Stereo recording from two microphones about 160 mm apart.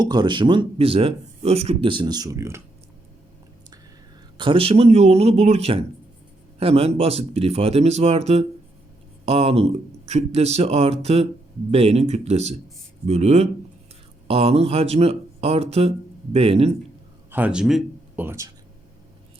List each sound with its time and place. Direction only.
0.0 s speech: 25° right (ahead or behind)
4.4 s speech: 35° right (ahead or behind)
17.3 s speech: 10° right (ahead or behind)
18.3 s speech: 20° right (ahead or behind)